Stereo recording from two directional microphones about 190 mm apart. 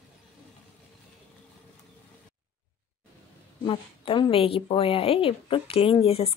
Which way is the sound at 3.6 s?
30° left (ahead or behind).